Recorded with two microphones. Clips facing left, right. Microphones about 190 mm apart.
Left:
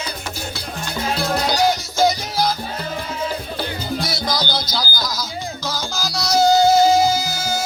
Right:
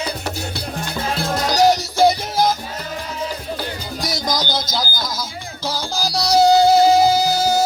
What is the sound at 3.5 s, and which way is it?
Music, 40° right (ahead or behind).